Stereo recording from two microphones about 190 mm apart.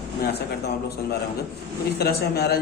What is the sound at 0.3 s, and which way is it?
Speech, 55° left (ahead or behind).